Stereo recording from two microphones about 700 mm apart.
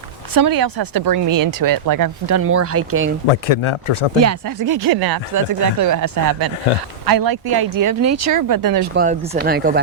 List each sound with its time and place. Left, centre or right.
0.3 s speech: right
3.2 s speech: left
4.2 s speech: right
9.0 s speech: centre